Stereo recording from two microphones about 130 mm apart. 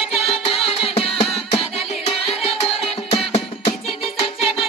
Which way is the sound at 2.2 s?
50° left (ahead or behind).